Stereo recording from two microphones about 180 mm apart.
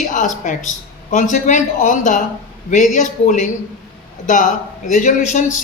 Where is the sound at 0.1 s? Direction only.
45° left (ahead or behind).